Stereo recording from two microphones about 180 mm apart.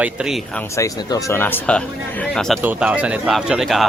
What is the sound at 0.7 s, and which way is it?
Speech, 20° left (ahead or behind).